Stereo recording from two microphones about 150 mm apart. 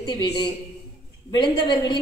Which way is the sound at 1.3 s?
30° left (ahead or behind).